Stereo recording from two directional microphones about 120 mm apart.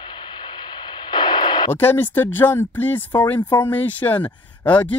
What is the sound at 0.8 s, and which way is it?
Radio, 35° left (ahead or behind).